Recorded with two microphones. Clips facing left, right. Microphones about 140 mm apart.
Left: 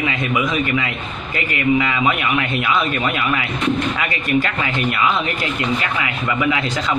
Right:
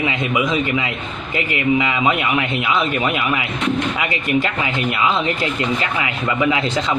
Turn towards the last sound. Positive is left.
turn(degrees=-25)  # may be behind; listen again after turning